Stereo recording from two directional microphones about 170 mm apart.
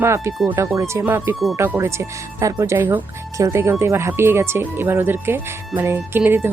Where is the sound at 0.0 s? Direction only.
15° right (ahead or behind).